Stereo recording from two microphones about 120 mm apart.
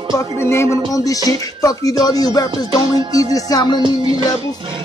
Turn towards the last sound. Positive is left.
turn(degrees=30)  # may be behind; listen again after turning